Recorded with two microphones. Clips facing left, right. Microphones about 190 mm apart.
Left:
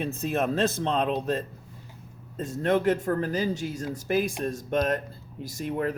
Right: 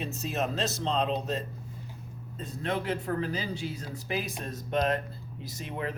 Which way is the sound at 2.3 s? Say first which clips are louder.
Left 8 dB; 45° left (ahead or behind).